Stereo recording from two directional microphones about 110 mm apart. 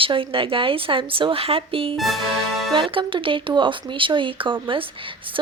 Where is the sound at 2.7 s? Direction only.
50° right (ahead or behind).